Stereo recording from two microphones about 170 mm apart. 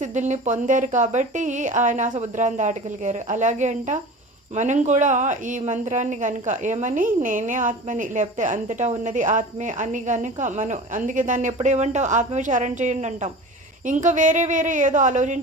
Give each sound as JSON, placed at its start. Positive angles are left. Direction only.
{"t": 0.0, "sound": "a woman's voice", "side_deg": -45}